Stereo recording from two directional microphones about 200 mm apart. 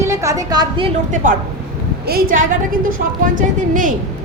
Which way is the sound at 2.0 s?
45° right (ahead or behind).